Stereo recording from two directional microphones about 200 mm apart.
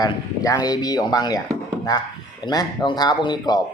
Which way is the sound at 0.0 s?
20° left (ahead or behind).